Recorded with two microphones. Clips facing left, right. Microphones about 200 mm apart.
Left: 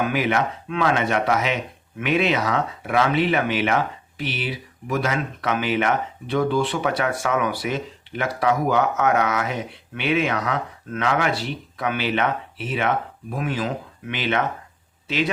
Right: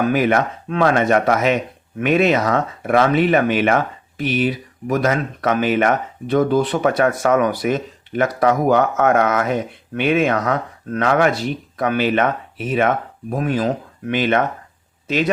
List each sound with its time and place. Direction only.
0.0 s speech: 45° right (ahead or behind)